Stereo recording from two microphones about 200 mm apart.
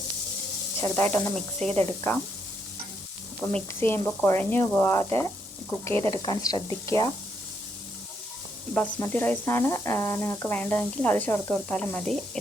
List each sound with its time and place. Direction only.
0.8 s speech: 10° left (ahead or behind)
1.5 s speech: 30° right (ahead or behind)
3.5 s speech: 10° left (ahead or behind)
5.9 s speech: 30° right (ahead or behind)
6.2 s speech: 20° left (ahead or behind)
8.7 s speech: 10° left (ahead or behind)